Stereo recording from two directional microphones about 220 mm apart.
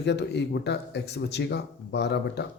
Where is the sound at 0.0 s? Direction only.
50° left (ahead or behind).